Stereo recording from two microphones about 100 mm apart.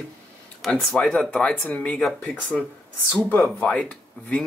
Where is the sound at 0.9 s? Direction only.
5° left (ahead or behind).